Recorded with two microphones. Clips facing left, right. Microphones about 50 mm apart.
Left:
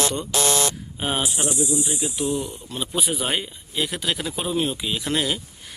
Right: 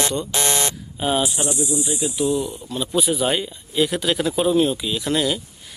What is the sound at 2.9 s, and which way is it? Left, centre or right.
Speech, centre.